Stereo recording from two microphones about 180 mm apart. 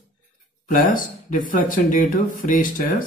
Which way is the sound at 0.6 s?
50° left (ahead or behind).